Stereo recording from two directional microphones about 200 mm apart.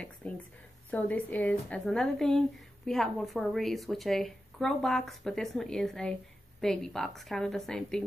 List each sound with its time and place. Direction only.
0.8 s a woman's voice: 5° left (ahead or behind)